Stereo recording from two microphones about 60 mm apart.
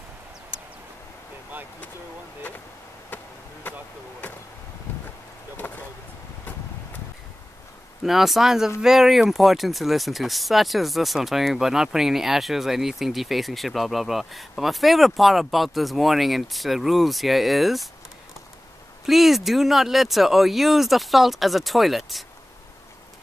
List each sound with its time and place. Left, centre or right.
5.6 s speech: left
8.0 s speech: centre
19.0 s speech: centre